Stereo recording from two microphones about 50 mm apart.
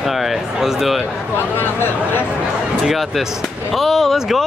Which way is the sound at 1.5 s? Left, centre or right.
Left.